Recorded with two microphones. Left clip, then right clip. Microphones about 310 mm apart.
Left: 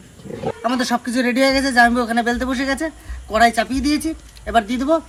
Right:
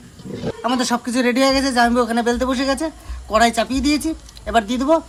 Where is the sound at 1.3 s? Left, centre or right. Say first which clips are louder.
Left 3 dB; centre.